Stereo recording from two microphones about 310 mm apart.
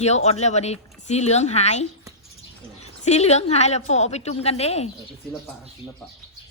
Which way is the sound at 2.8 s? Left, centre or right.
Left.